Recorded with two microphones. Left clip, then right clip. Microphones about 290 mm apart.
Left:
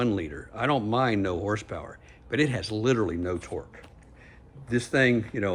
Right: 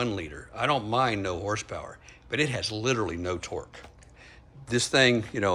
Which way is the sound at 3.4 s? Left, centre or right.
Centre.